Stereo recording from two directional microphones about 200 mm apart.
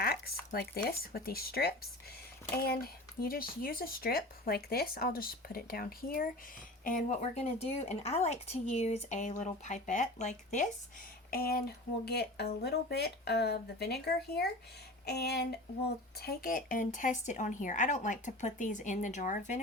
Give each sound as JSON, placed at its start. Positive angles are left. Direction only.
{"t": 0.0, "sound": "a sound", "side_deg": 50}
{"t": 0.9, "sound": "a woman's voice", "side_deg": 50}
{"t": 11.3, "sound": "a woman's voice", "side_deg": 50}